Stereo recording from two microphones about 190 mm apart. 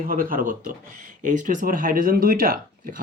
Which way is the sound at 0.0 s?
45° right (ahead or behind).